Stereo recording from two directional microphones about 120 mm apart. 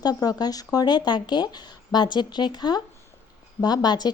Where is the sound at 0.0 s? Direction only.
30° left (ahead or behind).